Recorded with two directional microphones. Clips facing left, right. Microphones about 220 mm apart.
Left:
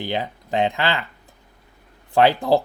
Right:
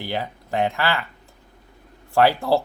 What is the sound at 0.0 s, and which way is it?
Speech, 20° left (ahead or behind).